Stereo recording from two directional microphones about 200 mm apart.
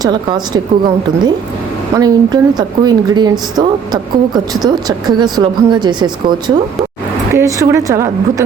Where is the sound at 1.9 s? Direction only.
20° right (ahead or behind).